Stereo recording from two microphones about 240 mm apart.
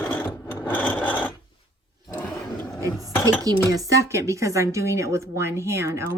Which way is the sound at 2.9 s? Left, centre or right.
Centre.